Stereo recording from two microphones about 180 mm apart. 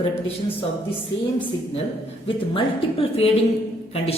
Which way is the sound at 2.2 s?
30° left (ahead or behind).